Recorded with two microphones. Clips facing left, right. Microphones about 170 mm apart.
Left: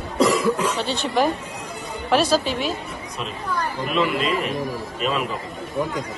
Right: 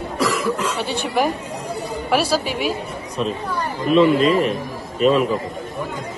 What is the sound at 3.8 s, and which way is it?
Speech, 35° right (ahead or behind).